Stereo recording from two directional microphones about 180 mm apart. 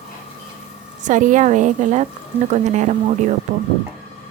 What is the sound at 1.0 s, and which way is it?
A woman's voice, 45° right (ahead or behind).